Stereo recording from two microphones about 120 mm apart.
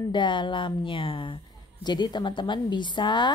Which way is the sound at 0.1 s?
40° left (ahead or behind).